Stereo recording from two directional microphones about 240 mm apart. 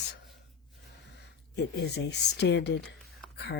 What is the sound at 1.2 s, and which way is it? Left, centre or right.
Speech, left.